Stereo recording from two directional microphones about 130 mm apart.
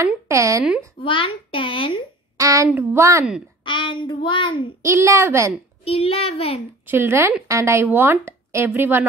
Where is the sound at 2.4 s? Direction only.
25° right (ahead or behind).